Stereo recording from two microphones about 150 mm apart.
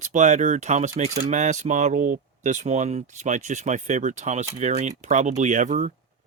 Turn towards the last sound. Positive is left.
turn(degrees=-55)  # may be behind; listen again after turning